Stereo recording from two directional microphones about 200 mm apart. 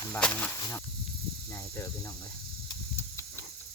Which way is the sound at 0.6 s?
15° left (ahead or behind).